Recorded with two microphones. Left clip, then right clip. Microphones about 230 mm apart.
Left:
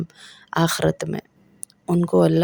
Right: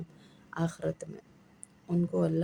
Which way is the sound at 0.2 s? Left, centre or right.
Left.